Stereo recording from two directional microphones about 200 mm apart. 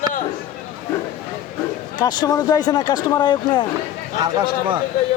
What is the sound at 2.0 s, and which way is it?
Speech, 20° left (ahead or behind).